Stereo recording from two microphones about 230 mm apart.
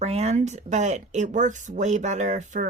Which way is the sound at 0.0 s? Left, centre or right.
Right.